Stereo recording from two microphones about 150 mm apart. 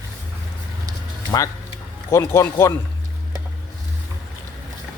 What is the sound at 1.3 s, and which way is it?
Speech, 25° left (ahead or behind).